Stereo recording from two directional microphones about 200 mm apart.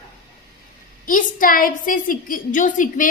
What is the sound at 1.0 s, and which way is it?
Speech, 45° left (ahead or behind).